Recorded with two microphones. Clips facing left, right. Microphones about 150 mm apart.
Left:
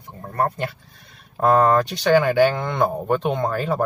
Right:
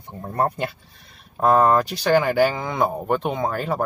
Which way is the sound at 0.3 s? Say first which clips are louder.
Even; 20° right (ahead or behind).